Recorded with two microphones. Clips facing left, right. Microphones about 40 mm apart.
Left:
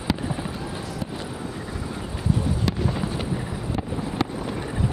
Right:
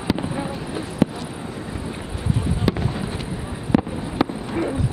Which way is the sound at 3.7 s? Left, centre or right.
Right.